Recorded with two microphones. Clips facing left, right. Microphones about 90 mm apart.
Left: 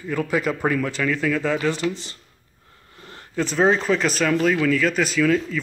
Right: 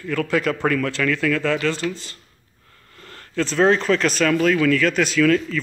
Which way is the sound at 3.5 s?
5° left (ahead or behind).